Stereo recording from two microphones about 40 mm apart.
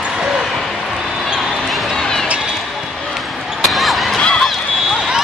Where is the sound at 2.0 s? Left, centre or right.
Centre.